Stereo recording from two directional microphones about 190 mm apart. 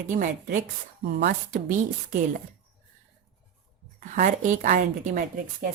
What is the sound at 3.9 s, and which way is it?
Speech, 40° right (ahead or behind).